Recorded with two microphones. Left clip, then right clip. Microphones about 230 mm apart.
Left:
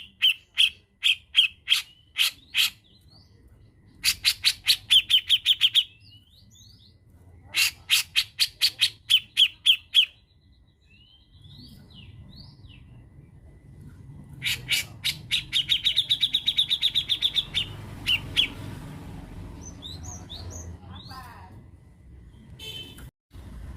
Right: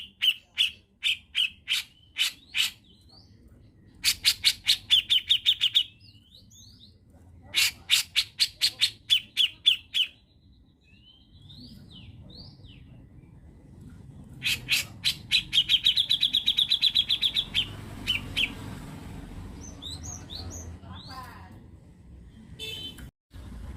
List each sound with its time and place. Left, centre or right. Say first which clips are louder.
0.2 s squawk: left 4 dB; centre
4.0 s bird: left 1 dB; centre
7.5 s bird: left 1 dB; centre
14.3 s bird: even; centre
15.3 s chirp: right 2 dB; centre